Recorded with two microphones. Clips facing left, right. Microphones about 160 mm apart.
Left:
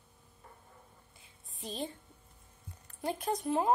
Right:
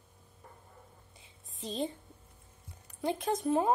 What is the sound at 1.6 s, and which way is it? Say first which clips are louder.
Speech: right 4 dB; 25° right (ahead or behind).